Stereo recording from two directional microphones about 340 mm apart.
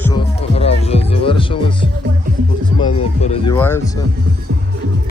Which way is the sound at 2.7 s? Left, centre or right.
Centre.